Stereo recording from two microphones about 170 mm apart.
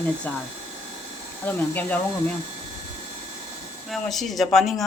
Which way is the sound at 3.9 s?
Centre (ahead or behind).